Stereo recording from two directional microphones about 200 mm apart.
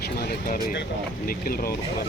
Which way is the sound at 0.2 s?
50° left (ahead or behind).